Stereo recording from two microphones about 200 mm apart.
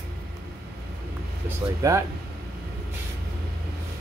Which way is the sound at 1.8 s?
15° right (ahead or behind).